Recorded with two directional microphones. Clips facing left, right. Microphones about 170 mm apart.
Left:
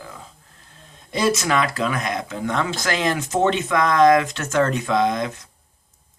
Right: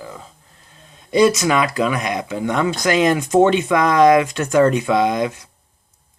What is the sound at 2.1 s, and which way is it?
Speech, 15° right (ahead or behind).